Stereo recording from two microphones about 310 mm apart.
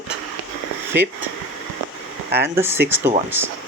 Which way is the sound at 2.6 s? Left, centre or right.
Centre.